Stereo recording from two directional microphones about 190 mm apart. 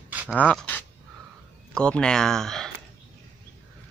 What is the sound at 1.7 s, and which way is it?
Speech, 5° left (ahead or behind).